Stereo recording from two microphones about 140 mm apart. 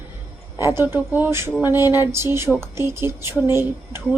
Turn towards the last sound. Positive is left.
turn(degrees=-15)  # may be behind; listen again after turning